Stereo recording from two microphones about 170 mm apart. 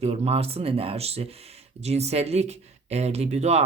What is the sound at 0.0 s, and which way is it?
Speech, 40° right (ahead or behind).